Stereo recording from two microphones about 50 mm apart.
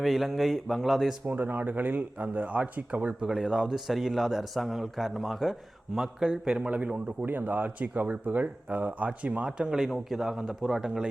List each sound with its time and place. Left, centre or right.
0.0 s speech: centre
1.3 s speech: right
3.2 s a man's voice: centre
3.8 s a man's voice: centre; by 7.3 s right
7.3 s speech: right
9.6 s a man's voice: centre